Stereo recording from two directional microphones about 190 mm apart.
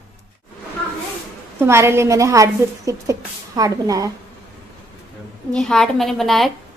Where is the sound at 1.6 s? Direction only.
15° right (ahead or behind).